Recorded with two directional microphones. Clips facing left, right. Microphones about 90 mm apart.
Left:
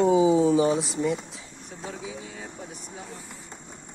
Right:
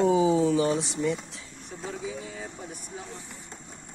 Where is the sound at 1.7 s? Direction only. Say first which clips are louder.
Right 2 dB; centre (ahead or behind).